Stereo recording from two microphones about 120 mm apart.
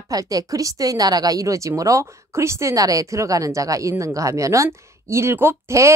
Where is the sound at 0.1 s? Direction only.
30° right (ahead or behind).